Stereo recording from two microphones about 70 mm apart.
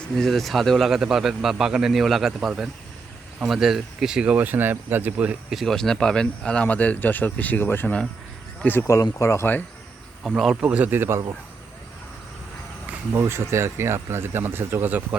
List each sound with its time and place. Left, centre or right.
0.2 s a man's voice: centre; by 5.4 s right
5.5 s a man's voice: centre; by 8.8 s left
9.1 s speech: left
10.2 s a man's voice: centre
10.5 s speech: centre
13.1 s speech: right